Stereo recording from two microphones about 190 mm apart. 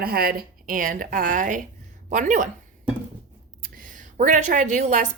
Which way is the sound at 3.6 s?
45° right (ahead or behind).